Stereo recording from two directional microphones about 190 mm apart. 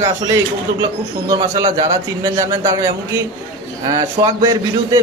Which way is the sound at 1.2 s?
20° right (ahead or behind).